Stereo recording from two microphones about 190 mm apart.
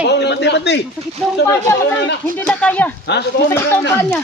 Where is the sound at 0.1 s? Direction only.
65° left (ahead or behind).